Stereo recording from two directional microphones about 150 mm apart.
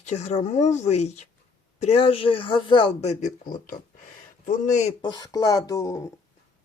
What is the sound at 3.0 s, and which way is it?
Speech, 50° left (ahead or behind).